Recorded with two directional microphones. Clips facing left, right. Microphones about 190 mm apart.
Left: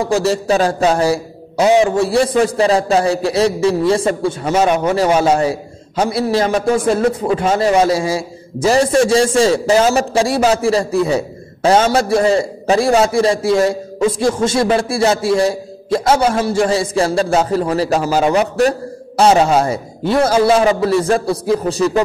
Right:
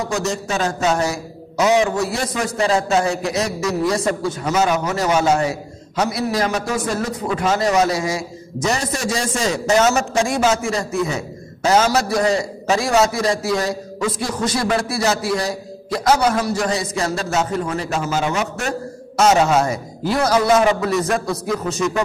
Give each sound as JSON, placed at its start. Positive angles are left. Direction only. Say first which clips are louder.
{"t": 0.0, "sound": "a man's voice", "louder": "left 7 dB", "side_deg": 30}